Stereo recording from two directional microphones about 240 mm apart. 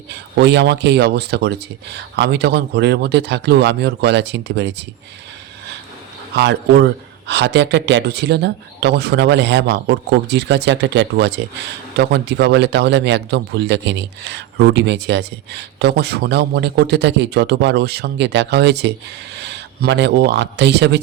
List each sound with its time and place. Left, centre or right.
0.1 s a man's voice: right
6.3 s a man's voice: right